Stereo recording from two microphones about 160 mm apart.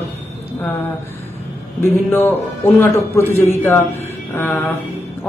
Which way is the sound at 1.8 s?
15° left (ahead or behind).